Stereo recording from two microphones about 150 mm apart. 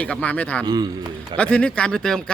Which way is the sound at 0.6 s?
25° right (ahead or behind).